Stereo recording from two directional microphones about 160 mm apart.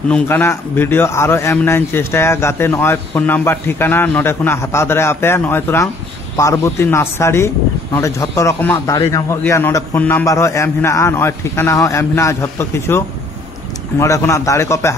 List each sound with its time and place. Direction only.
0.1 s a man's voice: 15° left (ahead or behind)